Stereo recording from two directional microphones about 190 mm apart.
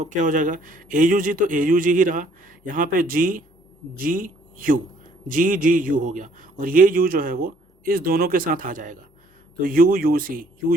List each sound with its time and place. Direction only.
0.0 s a man's voice: 40° right (ahead or behind)